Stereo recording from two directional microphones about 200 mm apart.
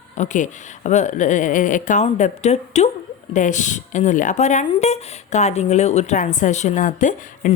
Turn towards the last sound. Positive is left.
turn(degrees=40)  # may be behind; listen again after turning